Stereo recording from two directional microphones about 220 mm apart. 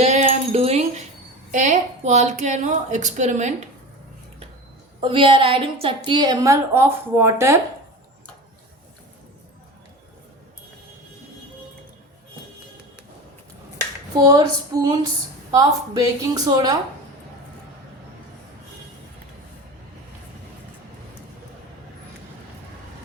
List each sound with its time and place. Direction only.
0.0 s a sound: 30° right (ahead or behind)
1.5 s a woman's voice: 35° right (ahead or behind)
4.9 s a woman's voice: 25° right (ahead or behind)
14.3 s a woman's voice: 20° right (ahead or behind)